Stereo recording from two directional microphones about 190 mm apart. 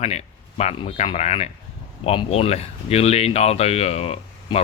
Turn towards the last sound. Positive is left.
turn(degrees=30)  # may be behind; listen again after turning